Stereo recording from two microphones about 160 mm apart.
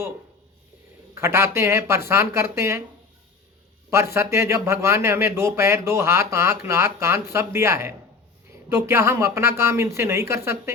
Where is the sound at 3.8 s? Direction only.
15° right (ahead or behind).